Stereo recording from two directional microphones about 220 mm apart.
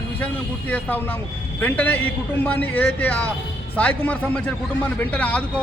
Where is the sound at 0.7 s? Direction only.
5° left (ahead or behind).